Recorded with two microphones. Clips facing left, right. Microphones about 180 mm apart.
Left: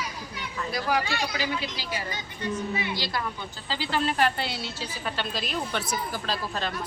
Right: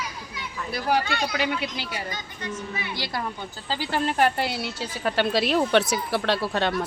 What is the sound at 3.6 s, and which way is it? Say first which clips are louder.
Speech: right 2 dB; 50° right (ahead or behind).